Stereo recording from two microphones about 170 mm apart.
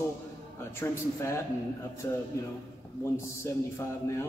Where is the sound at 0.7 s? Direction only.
15° left (ahead or behind).